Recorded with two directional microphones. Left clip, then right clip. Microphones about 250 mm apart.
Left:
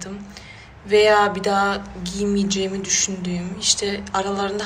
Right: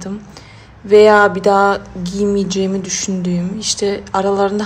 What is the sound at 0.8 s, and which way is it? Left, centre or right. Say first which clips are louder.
A woman's voice: right 7 dB; right.